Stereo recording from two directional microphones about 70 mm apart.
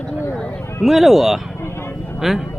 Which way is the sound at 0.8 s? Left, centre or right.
Centre.